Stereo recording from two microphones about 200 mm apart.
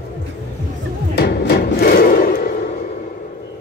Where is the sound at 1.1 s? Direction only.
55° left (ahead or behind).